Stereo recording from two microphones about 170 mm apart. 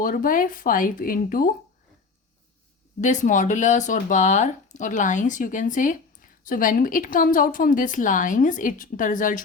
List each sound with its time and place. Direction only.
0.0 s speech: 55° left (ahead or behind)
3.0 s speech: 45° left (ahead or behind)